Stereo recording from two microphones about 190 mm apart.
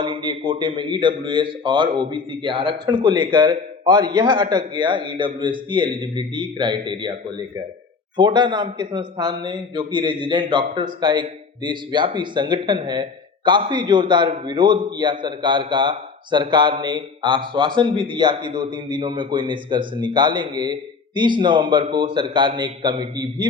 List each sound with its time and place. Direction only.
0.0 s a man's voice: 25° right (ahead or behind)